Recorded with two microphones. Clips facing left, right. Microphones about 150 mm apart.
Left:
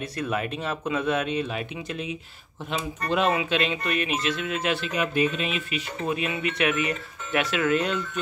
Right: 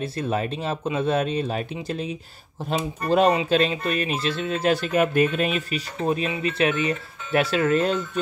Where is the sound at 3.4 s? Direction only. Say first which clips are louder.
Right 4 dB; 35° right (ahead or behind).